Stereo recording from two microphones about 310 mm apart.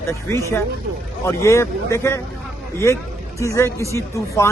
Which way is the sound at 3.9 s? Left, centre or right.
Centre.